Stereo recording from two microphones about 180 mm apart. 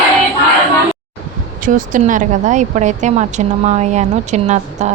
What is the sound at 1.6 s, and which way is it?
Speech, 45° right (ahead or behind).